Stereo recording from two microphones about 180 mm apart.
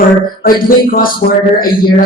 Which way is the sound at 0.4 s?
50° left (ahead or behind).